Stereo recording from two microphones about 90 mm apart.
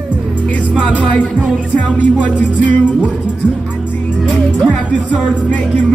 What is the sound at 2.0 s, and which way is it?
Music, 15° left (ahead or behind).